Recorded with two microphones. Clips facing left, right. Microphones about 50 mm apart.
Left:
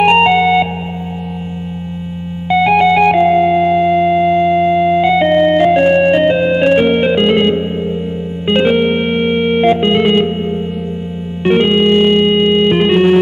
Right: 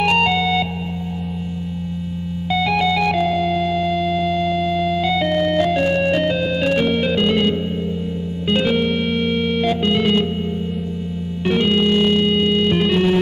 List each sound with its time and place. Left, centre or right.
0.0 s music: left
2.5 s music: left
11.4 s music: left